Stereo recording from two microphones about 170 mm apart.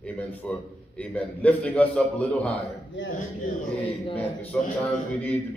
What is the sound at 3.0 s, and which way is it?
Speech, 90° left.